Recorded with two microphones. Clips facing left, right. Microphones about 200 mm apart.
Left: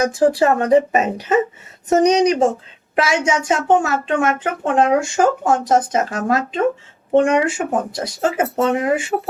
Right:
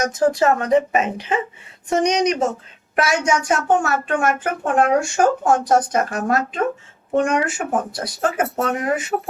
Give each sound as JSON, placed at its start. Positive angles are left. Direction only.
{"t": 0.0, "sound": "a woman's voice", "side_deg": 30}